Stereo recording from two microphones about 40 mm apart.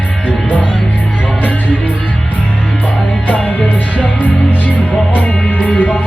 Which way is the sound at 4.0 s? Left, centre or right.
Left.